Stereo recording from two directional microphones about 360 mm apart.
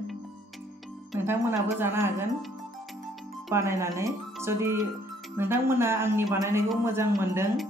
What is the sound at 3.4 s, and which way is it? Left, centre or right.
Speech, centre.